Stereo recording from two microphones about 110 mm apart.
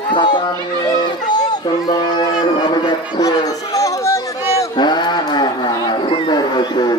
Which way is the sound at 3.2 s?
35° left (ahead or behind).